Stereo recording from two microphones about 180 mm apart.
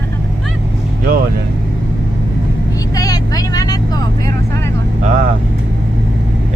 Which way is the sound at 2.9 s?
20° left (ahead or behind).